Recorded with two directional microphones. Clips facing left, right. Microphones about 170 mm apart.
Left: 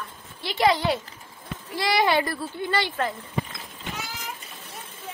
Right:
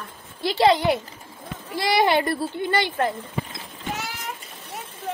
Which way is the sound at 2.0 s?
25° right (ahead or behind).